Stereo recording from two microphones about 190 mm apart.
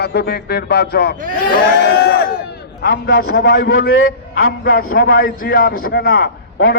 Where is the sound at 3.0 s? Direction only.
90° left.